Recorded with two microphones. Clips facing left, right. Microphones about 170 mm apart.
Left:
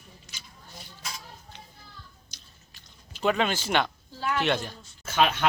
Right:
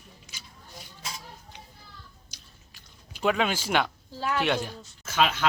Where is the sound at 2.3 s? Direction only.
10° right (ahead or behind).